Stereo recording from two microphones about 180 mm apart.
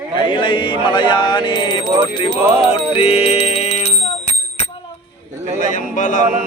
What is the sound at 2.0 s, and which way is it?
Speech, 30° left (ahead or behind).